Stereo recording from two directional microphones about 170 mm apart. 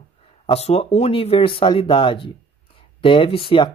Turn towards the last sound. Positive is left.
turn(degrees=30)  # may be behind; listen again after turning